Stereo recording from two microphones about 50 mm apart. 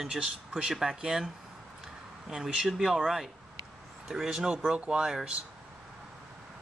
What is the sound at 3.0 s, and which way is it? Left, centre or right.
Speech, centre.